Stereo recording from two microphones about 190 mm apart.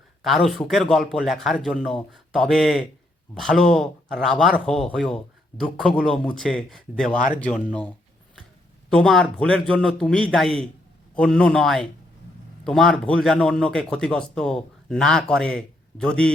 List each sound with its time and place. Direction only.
0.2 s speech: centre (ahead or behind)